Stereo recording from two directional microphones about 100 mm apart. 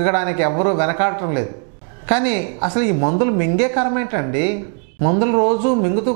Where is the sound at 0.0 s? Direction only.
15° right (ahead or behind).